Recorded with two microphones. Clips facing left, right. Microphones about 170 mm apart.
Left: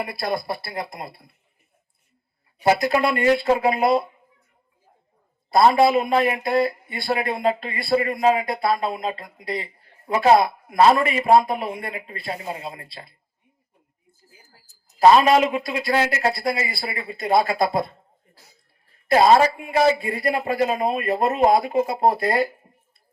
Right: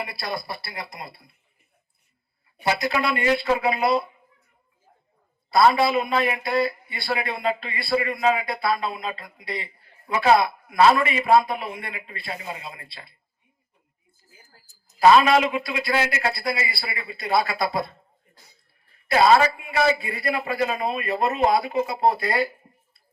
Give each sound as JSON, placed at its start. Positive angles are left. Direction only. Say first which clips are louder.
{"t": 0.0, "sound": "speech", "louder": "left 5 dB", "side_deg": 50}
{"t": 2.6, "sound": "speech", "louder": "left 5 dB", "side_deg": 50}
{"t": 5.5, "sound": "speech", "louder": "left 3 dB", "side_deg": 45}
{"t": 14.9, "sound": "speech", "louder": "left 2 dB", "side_deg": 40}
{"t": 19.0, "sound": "speech", "louder": "left 2 dB", "side_deg": 45}